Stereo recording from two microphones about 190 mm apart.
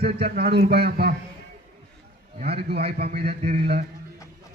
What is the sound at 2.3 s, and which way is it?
Speech, 35° right (ahead or behind).